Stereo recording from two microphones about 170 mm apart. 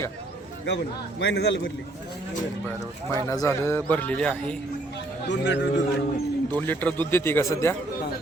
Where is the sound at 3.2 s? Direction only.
15° left (ahead or behind).